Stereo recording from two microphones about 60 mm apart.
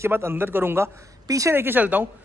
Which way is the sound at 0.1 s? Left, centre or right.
Right.